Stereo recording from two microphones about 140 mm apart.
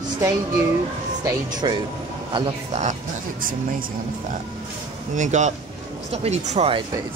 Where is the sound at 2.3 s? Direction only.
40° right (ahead or behind).